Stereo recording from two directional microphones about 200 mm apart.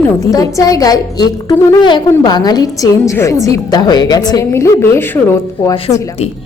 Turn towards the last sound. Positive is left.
turn(degrees=10)  # may be behind; listen again after turning